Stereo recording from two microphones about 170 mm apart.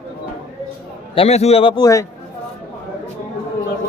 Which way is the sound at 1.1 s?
35° left (ahead or behind).